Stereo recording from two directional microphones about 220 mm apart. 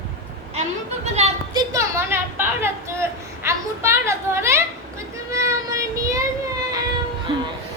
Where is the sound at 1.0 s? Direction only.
30° right (ahead or behind).